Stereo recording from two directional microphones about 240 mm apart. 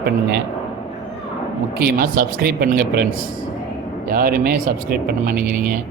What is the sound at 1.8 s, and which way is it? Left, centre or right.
Speech, right.